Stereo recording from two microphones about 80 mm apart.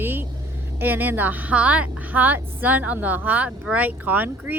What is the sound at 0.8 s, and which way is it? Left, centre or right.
A woman's voice, right.